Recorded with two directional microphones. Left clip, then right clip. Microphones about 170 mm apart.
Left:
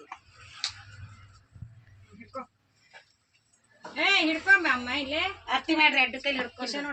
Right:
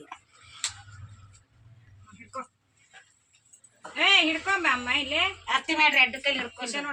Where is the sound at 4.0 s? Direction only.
5° left (ahead or behind).